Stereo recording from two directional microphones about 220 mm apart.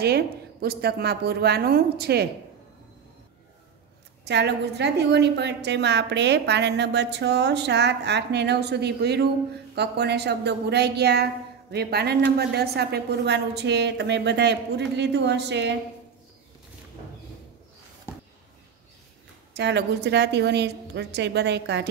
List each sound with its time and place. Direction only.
0.0 s a woman's voice: 45° right (ahead or behind)
4.3 s a woman's voice: 50° right (ahead or behind)
19.5 s a woman's voice: 50° right (ahead or behind)